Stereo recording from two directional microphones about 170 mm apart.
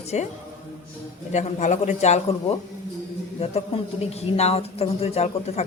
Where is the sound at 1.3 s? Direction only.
45° left (ahead or behind).